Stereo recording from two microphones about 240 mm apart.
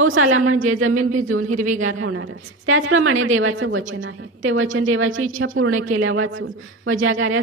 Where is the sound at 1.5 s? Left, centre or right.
Right.